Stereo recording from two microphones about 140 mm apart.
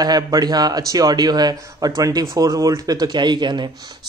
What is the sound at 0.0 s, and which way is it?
Speech, 30° right (ahead or behind).